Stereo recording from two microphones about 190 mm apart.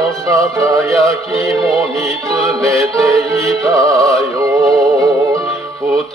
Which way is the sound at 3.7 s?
20° right (ahead or behind).